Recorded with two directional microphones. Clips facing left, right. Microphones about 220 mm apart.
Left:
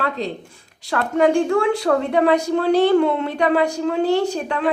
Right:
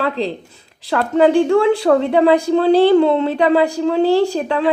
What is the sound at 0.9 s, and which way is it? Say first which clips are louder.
A woman's voice: right 4 dB; 30° right (ahead or behind).